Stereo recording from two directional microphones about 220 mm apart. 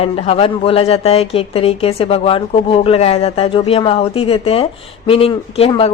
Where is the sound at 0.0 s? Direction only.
30° left (ahead or behind).